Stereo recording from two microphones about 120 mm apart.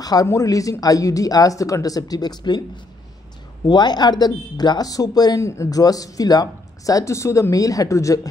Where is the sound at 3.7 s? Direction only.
35° left (ahead or behind).